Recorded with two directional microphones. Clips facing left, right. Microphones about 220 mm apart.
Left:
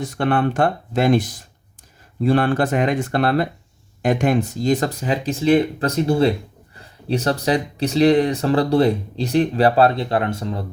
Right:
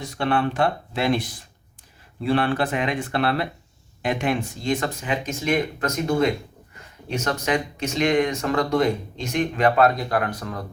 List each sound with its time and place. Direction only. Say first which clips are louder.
0.0 s speech: left 4 dB; 50° left (ahead or behind); by 10.7 s 25° left (ahead or behind)